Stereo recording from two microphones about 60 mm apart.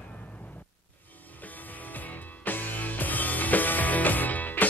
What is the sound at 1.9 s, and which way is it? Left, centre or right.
Music, left.